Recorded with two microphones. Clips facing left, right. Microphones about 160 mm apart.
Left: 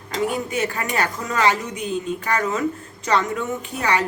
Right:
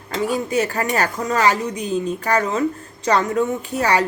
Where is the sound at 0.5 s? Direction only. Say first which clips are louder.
Right 4 dB; 40° right (ahead or behind).